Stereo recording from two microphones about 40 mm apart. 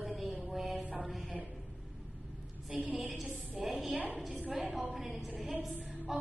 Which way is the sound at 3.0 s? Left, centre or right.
Centre.